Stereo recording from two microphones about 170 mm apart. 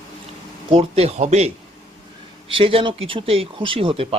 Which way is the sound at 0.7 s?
35° right (ahead or behind).